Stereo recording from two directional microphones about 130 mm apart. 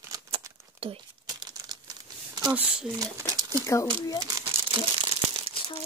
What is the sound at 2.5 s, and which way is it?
Speech, 15° right (ahead or behind).